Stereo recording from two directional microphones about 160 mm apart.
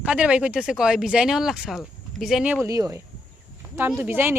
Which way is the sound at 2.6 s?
20° right (ahead or behind).